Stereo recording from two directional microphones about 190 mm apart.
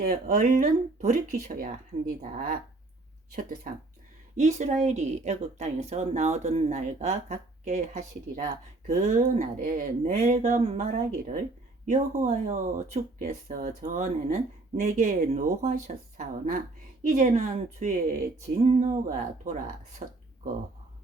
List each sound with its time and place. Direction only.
0.0 s a woman's voice: 45° right (ahead or behind)